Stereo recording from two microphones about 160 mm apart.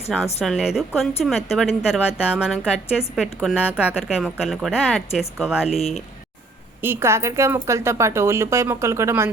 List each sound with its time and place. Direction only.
0.1 s a woman's voice: centre (ahead or behind)
5.7 s speech: 40° left (ahead or behind)
6.8 s speech: 15° right (ahead or behind)